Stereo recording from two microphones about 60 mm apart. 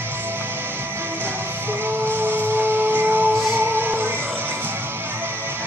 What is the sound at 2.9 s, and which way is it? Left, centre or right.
Music, right.